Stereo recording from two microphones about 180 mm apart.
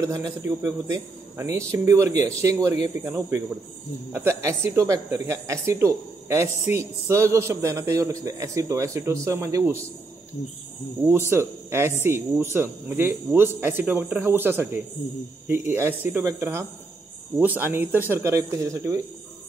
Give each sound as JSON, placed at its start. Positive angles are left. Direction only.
{"t": 0.0, "sound": "speech", "side_deg": -20}
{"t": 11.1, "sound": "speech", "side_deg": -10}